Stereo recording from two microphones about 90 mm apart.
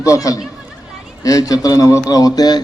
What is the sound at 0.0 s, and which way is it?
A man's voice, 40° left (ahead or behind).